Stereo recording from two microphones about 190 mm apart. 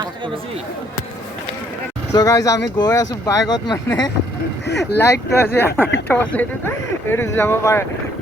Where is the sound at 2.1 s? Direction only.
20° left (ahead or behind).